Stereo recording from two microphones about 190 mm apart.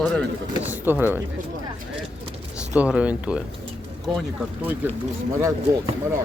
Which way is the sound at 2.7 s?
5° right (ahead or behind).